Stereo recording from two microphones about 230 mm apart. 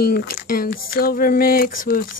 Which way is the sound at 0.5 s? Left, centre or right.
Left.